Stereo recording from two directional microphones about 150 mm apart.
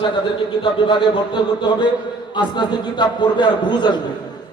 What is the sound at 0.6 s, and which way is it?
A man's voice, 30° left (ahead or behind).